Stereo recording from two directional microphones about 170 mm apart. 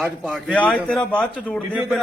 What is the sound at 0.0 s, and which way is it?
A man's voice, centre (ahead or behind).